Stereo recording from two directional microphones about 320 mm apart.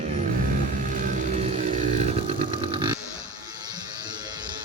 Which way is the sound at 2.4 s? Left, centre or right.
Centre.